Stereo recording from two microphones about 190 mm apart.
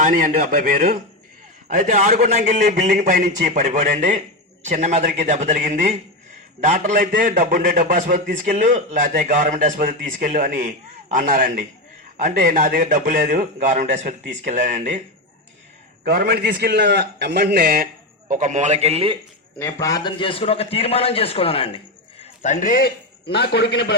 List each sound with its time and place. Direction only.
0.0 s a man's voice: 45° right (ahead or behind)
16.0 s a man's voice: 50° right (ahead or behind)
18.3 s a man's voice: 40° right (ahead or behind)
19.5 s a man's voice: 15° left (ahead or behind)
22.2 s a man's voice: 40° left (ahead or behind); by 24.0 s 60° left (ahead or behind)